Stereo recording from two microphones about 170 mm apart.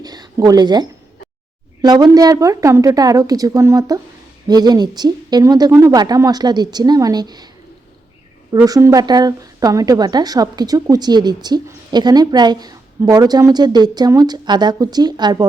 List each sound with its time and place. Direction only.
0.0 s a woman's voice: 25° right (ahead or behind)
8.6 s a woman's voice: 20° right (ahead or behind)